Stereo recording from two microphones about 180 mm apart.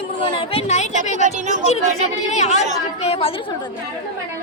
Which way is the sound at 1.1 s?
45° right (ahead or behind).